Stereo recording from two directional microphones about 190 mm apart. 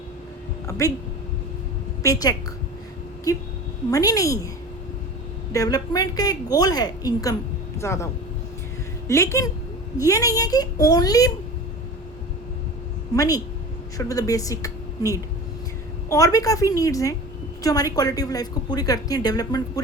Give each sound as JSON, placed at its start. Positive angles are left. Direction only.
{"t": 0.7, "sound": "a woman's voice", "side_deg": 15}
{"t": 2.0, "sound": "a woman's voice", "side_deg": 20}
{"t": 5.5, "sound": "a woman's voice", "side_deg": 20}
{"t": 13.1, "sound": "a woman's voice", "side_deg": 20}